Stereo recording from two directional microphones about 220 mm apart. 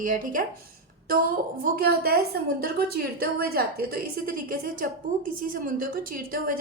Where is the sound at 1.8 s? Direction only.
45° right (ahead or behind).